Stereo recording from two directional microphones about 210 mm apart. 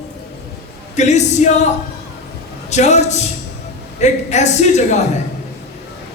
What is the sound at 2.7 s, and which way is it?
Speech, 35° left (ahead or behind).